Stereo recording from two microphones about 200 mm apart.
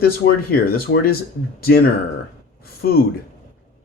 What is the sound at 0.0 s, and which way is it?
Speech, 50° left (ahead or behind).